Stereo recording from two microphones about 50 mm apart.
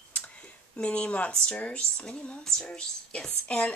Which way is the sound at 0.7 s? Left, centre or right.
Left.